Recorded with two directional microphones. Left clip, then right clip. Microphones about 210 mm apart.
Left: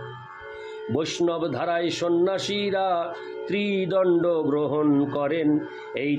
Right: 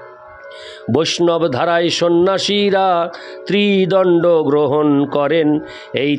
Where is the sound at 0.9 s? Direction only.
50° right (ahead or behind).